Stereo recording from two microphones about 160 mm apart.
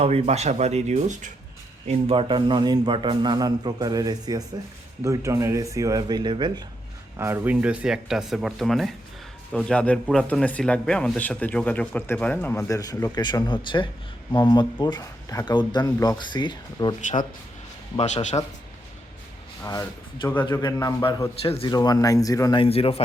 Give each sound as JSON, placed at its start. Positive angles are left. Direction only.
{"t": 0.0, "sound": "speech", "side_deg": -40}
{"t": 1.9, "sound": "a man's voice", "side_deg": -35}
{"t": 7.2, "sound": "a man's voice", "side_deg": -15}
{"t": 17.9, "sound": "speech", "side_deg": 45}
{"t": 19.6, "sound": "a man's voice", "side_deg": 20}
{"t": 22.6, "sound": "a man's voice", "side_deg": 35}